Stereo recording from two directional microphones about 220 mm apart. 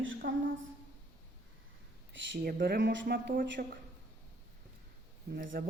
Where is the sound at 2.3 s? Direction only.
45° right (ahead or behind).